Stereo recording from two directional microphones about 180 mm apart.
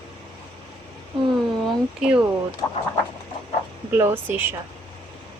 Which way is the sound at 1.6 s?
5° right (ahead or behind).